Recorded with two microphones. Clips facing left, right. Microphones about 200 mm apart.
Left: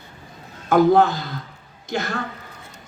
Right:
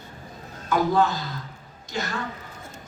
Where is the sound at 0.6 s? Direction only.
55° left (ahead or behind).